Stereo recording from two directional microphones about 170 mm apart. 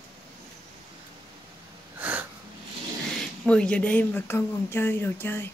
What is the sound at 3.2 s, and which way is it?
Speech, 5° left (ahead or behind).